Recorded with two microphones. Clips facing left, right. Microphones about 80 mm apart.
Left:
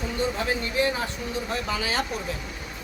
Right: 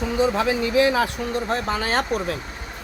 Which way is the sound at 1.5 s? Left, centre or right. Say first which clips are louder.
Right 4 dB; right.